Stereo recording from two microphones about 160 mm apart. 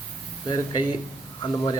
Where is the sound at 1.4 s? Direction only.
25° left (ahead or behind).